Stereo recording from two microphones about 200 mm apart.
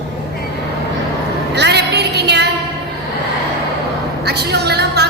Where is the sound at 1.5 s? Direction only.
55° right (ahead or behind).